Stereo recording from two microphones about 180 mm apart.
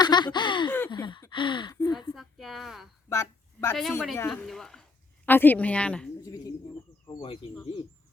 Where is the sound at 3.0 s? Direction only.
15° left (ahead or behind).